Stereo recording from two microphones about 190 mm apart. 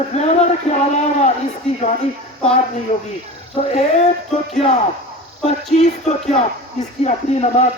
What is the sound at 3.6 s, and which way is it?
Speech, 35° left (ahead or behind).